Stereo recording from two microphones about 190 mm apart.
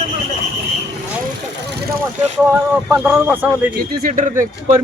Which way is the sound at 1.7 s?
60° right (ahead or behind).